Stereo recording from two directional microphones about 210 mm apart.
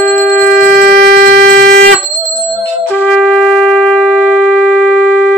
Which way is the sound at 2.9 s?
10° left (ahead or behind).